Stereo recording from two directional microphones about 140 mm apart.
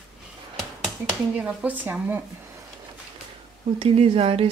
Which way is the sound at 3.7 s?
45° right (ahead or behind).